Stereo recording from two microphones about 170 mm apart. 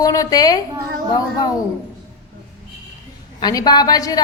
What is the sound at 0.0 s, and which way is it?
Speech, 20° left (ahead or behind).